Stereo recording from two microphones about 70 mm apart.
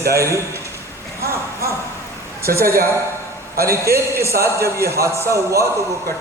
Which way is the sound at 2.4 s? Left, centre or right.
Right.